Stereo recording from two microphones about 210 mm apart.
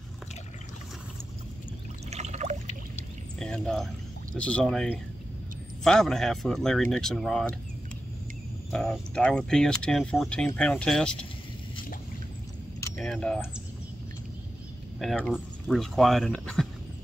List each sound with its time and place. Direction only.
2.0 s water: 30° right (ahead or behind)
3.3 s pour: 5° left (ahead or behind)
4.4 s speech: 5° left (ahead or behind)
8.7 s speech: 5° left (ahead or behind)
12.9 s speech: centre (ahead or behind)
15.0 s speech: 5° left (ahead or behind)